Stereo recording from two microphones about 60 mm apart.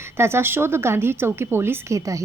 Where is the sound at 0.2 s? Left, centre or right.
Right.